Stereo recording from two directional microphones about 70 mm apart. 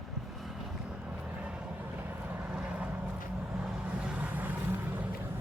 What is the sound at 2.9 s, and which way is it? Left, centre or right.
Vehicle, right.